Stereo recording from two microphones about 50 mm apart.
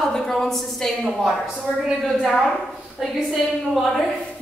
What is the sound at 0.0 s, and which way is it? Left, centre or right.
A woman's voice, centre.